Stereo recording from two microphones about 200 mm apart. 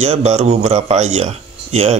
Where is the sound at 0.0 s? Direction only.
35° right (ahead or behind).